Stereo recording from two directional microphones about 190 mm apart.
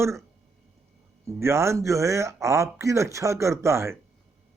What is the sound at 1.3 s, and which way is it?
A man's voice, 15° right (ahead or behind).